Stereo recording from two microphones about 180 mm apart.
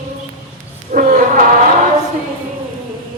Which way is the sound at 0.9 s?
50° right (ahead or behind).